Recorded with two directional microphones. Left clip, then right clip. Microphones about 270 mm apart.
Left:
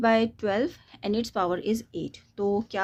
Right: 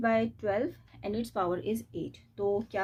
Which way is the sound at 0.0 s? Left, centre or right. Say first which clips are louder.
Left 5 dB; left.